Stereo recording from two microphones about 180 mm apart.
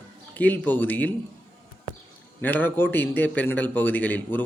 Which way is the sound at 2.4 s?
10° left (ahead or behind).